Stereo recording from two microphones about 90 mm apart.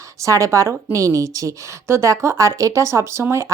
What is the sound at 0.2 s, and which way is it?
A woman's voice, 35° right (ahead or behind).